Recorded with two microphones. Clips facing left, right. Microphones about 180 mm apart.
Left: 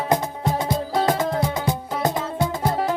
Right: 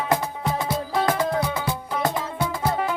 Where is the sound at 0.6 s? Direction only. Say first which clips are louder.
Left 2 dB; 20° left (ahead or behind).